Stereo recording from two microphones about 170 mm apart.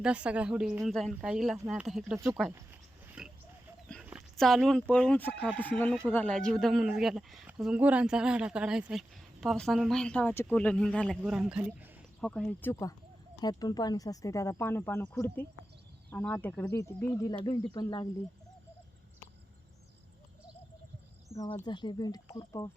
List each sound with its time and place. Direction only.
0.0 s speech: 5° right (ahead or behind)
2.1 s speech: 20° right (ahead or behind)
3.2 s a sound: centre (ahead or behind)
4.4 s speech: centre (ahead or behind)
12.2 s speech: 5° left (ahead or behind)
13.4 s speech: 25° left (ahead or behind)
21.3 s speech: 15° left (ahead or behind)
21.7 s speech: 25° left (ahead or behind)